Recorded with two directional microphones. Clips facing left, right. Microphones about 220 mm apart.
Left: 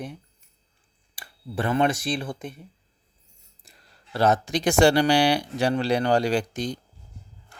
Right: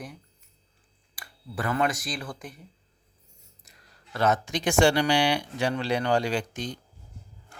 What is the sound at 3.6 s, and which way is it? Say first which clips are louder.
Speech: left 2 dB; 30° left (ahead or behind).